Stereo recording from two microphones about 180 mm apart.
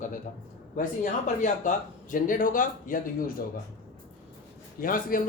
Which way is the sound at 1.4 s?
45° left (ahead or behind).